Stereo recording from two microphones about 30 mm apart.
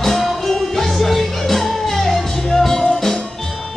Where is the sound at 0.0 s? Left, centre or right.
Centre.